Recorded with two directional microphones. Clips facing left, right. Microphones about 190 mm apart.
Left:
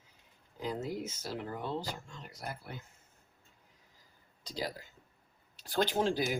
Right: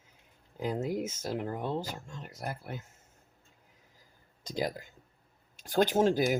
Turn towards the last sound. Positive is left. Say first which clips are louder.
# right 5 dB
turn(degrees=-45)  # may be behind; listen again after turning